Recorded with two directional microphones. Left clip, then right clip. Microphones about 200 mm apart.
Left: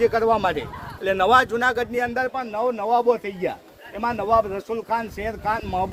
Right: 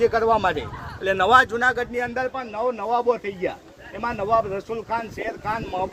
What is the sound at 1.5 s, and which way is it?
Speech, 45° left (ahead or behind).